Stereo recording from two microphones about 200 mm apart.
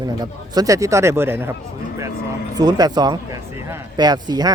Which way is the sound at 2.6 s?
20° right (ahead or behind).